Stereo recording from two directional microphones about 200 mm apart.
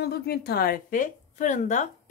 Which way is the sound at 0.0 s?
55° left (ahead or behind).